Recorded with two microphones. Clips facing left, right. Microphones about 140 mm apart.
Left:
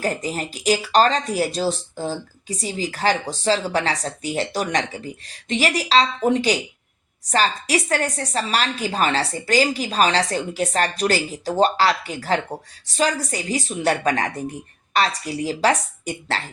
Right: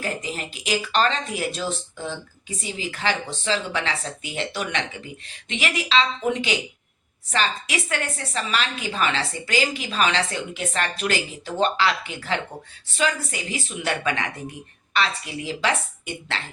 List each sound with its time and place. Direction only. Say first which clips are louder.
0.0 s a woman's voice: left 5 dB; 40° left (ahead or behind)